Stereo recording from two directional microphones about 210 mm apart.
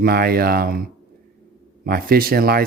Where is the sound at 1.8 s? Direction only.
45° right (ahead or behind).